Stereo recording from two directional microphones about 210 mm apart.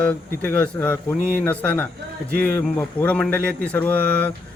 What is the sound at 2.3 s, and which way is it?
Speech, 45° right (ahead or behind).